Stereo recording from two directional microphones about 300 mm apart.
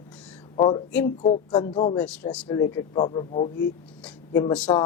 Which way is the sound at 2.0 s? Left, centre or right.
Centre.